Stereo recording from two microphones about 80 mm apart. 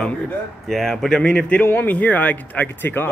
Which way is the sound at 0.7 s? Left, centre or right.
Centre.